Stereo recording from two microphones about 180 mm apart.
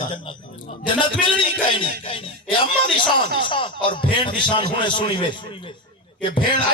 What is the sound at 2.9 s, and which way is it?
A man's voice, 25° left (ahead or behind).